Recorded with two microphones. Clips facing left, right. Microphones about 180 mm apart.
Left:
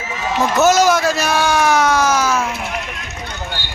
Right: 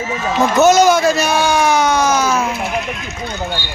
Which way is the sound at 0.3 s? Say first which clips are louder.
Right 3 dB; 5° left (ahead or behind).